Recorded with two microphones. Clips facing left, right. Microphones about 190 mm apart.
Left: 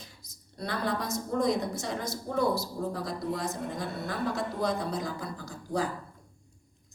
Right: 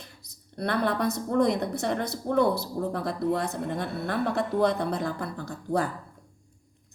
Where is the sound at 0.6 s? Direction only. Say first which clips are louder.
Right 6 dB; 60° right (ahead or behind).